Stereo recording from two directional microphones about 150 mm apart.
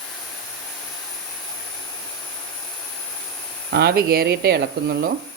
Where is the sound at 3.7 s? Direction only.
90° right.